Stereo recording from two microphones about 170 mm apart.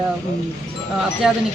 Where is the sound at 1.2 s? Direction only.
5° right (ahead or behind).